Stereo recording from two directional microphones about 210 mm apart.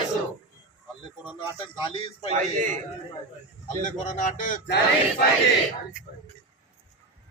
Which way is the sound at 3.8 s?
35° left (ahead or behind).